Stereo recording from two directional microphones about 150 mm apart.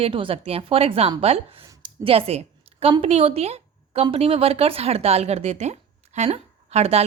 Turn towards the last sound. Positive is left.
turn(degrees=-45)  # may be behind; listen again after turning